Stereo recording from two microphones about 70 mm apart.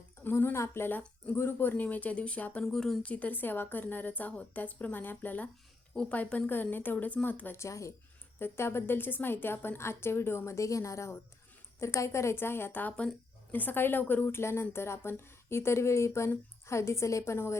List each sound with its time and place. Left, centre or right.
0.3 s a woman's voice: left
2.7 s a woman's voice: centre
3.0 s a woman's voice: centre
7.6 s speech: left
8.4 s speech: left